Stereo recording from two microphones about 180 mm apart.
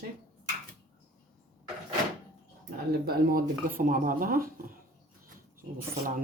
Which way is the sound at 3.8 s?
50° right (ahead or behind).